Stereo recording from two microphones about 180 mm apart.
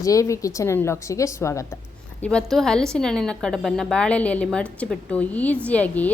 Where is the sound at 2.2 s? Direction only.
5° left (ahead or behind).